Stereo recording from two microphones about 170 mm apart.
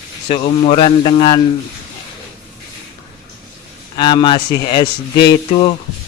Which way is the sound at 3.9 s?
25° left (ahead or behind).